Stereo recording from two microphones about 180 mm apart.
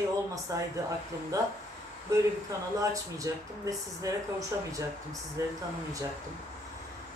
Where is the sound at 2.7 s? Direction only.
20° right (ahead or behind).